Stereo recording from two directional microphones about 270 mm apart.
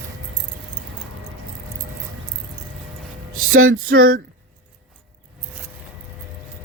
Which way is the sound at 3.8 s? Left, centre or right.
Right.